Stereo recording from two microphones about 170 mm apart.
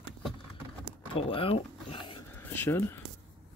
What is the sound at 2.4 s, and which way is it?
Speech, 10° left (ahead or behind).